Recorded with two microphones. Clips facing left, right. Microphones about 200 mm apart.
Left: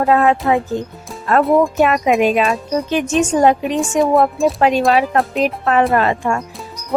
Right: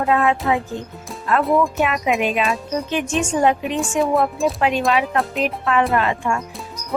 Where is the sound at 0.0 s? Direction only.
40° left (ahead or behind).